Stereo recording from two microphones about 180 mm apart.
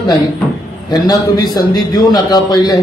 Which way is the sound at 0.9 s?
20° left (ahead or behind).